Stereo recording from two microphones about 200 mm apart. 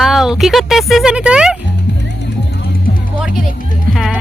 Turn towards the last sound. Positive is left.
turn(degrees=0)  # may be behind; listen again after turning